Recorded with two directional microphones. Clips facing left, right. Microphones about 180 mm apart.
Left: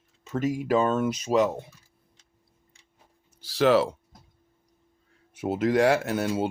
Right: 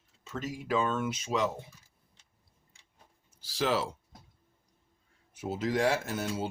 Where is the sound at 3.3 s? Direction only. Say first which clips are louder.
Left 9 dB; 65° left (ahead or behind).